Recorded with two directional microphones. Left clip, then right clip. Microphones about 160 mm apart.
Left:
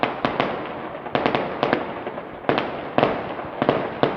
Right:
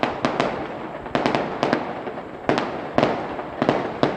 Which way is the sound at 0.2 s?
10° right (ahead or behind).